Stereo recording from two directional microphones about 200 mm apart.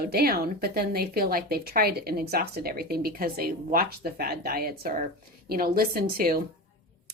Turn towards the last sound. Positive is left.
turn(degrees=-50)  # may be behind; listen again after turning